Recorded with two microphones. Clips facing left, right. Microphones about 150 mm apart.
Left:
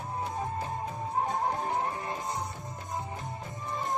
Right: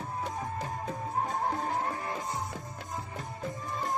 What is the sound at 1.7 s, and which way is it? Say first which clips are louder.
Music: left 1 dB; 20° left (ahead or behind).